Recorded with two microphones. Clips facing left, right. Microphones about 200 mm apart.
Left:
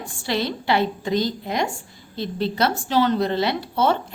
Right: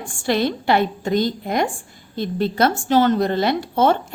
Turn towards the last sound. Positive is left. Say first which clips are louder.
# right 3 dB
turn(degrees=-50)  # may be behind; listen again after turning